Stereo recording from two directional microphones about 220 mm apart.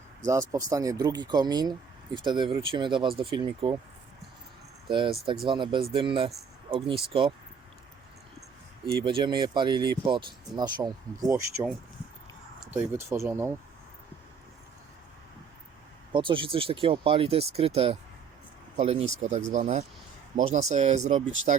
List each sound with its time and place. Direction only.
0.3 s speech: 15° right (ahead or behind)
4.9 s speech: 20° right (ahead or behind)
9.0 s speech: 20° right (ahead or behind)
12.9 s speech: 10° right (ahead or behind)
16.1 s speech: 20° right (ahead or behind)